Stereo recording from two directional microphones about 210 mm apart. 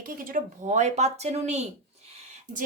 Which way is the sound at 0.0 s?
40° right (ahead or behind).